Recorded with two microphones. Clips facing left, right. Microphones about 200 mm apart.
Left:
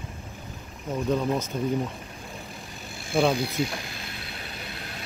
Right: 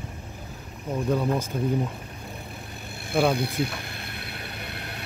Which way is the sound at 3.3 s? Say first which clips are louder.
Even; 60° right (ahead or behind).